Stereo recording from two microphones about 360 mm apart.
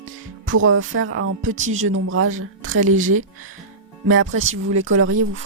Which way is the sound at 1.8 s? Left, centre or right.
Right.